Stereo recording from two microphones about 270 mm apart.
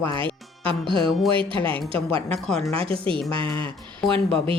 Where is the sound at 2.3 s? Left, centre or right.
Centre.